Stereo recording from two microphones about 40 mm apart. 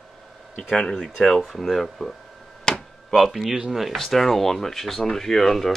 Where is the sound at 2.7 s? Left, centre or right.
Centre.